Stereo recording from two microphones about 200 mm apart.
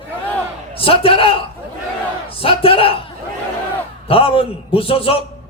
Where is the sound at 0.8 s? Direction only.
25° left (ahead or behind).